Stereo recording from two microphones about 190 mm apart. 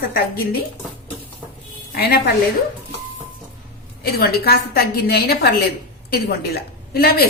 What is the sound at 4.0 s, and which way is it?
A woman's voice, 55° left (ahead or behind).